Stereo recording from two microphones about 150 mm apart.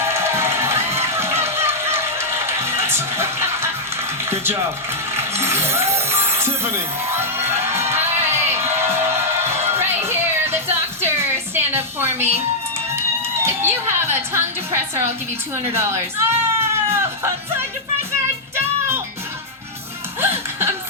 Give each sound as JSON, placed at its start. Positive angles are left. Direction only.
{"t": 0.0, "sound": "music", "side_deg": -15}
{"t": 4.3, "sound": "a sound", "side_deg": -15}
{"t": 5.1, "sound": "music", "side_deg": -15}
{"t": 13.0, "sound": "a woman's voice", "side_deg": -15}
{"t": 18.5, "sound": "music", "side_deg": -15}
{"t": 20.2, "sound": "music", "side_deg": -15}